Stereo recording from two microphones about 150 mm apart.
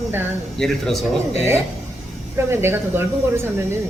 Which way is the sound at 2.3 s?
15° right (ahead or behind).